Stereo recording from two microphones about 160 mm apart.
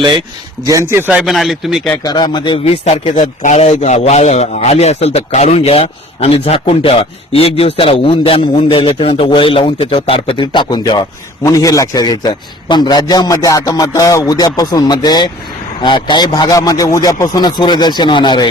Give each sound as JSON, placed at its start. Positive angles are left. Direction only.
{"t": 0.6, "sound": "a man's voice", "side_deg": -20}
{"t": 2.0, "sound": "a man's voice", "side_deg": 25}